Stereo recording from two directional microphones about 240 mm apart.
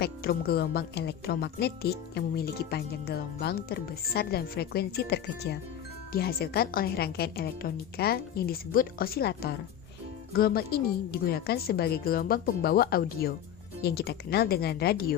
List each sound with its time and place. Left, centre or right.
0.0 s a woman's voice: left